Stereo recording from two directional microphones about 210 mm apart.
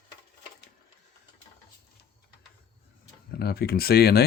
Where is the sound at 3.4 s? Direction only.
50° left (ahead or behind).